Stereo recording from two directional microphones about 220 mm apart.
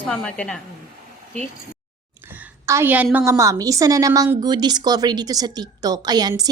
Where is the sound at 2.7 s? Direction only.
10° right (ahead or behind).